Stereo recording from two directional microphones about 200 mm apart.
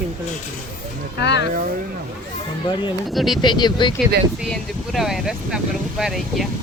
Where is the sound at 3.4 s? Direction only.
20° left (ahead or behind).